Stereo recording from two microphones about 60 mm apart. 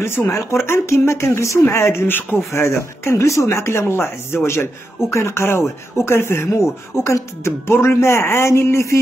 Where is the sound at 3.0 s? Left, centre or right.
Left.